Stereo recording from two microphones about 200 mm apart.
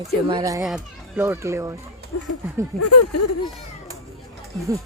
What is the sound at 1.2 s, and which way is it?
Speech, 15° right (ahead or behind).